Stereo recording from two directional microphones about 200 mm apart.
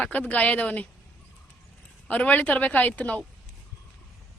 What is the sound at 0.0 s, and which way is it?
Speech, 5° left (ahead or behind).